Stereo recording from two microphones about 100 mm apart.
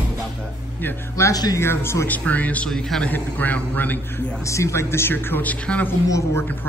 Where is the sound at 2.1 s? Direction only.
15° left (ahead or behind).